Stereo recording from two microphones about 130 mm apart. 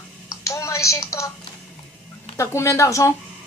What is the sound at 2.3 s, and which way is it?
Speech, 20° left (ahead or behind).